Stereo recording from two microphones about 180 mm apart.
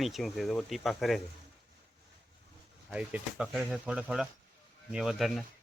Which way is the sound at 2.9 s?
5° right (ahead or behind).